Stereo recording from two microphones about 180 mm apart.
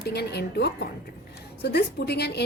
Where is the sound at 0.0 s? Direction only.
65° left (ahead or behind).